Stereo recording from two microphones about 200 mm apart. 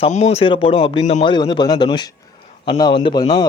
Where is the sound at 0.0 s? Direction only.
35° left (ahead or behind).